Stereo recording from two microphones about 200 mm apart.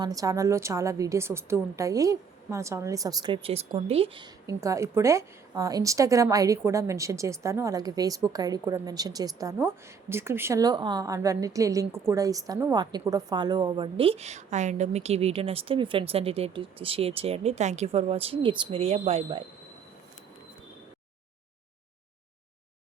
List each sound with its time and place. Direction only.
0.0 s a woman's voice: 15° right (ahead or behind)